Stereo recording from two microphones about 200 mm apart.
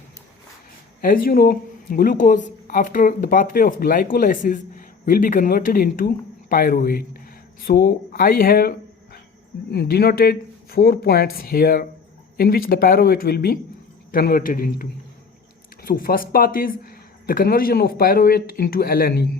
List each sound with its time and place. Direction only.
1.0 s speech: 45° left (ahead or behind)
9.7 s speech: 50° left (ahead or behind)